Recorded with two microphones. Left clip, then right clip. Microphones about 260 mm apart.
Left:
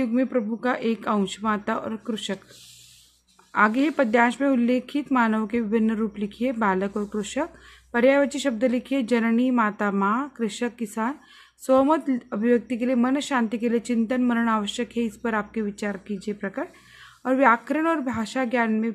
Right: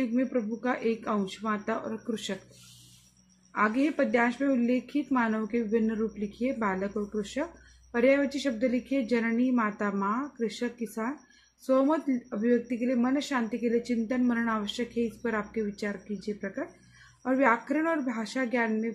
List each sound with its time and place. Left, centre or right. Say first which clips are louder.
0.0 s speech: left 5 dB; left
3.5 s speech: left 6 dB; left